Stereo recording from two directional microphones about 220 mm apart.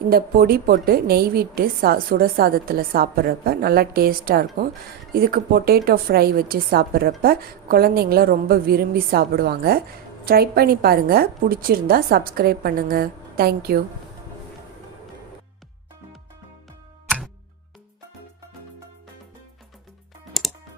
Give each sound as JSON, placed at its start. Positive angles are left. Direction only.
{"t": 0.1, "sound": "a woman's voice", "side_deg": -40}
{"t": 20.4, "sound": "music", "side_deg": 0}